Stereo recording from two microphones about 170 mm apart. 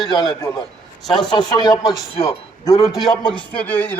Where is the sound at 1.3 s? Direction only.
25° left (ahead or behind).